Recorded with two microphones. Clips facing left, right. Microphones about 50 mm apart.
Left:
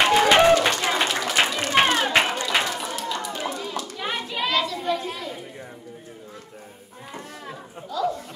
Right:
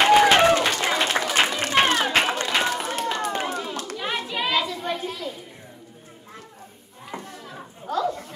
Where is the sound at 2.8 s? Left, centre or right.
Right.